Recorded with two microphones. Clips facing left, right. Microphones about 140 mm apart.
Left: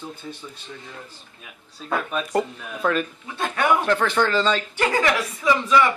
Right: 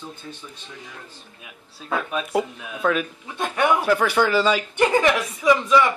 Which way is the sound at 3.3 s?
15° right (ahead or behind).